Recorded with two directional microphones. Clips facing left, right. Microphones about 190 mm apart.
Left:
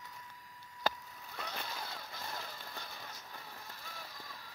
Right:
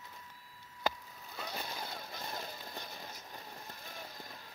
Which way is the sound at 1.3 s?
10° right (ahead or behind).